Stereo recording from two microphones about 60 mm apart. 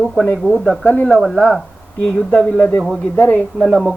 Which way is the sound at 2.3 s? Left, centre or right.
Left.